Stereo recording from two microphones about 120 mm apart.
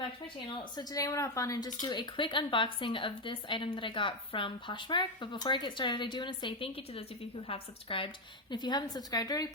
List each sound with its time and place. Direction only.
0.4 s a woman's voice: 35° left (ahead or behind)